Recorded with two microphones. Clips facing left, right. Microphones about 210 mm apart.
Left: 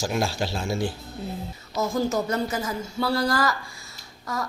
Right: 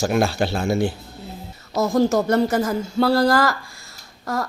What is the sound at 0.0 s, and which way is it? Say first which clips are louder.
A woman's voice: right 6 dB; 60° right (ahead or behind).